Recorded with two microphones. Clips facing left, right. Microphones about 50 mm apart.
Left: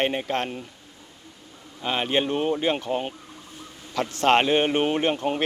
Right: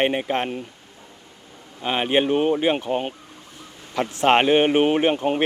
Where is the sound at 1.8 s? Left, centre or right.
Centre.